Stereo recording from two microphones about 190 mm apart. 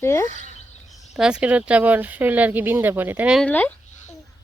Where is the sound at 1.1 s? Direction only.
5° right (ahead or behind).